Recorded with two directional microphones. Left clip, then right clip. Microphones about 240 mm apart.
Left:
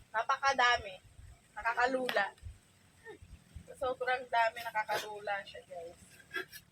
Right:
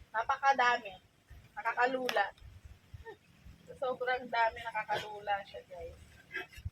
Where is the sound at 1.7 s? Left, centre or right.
Left.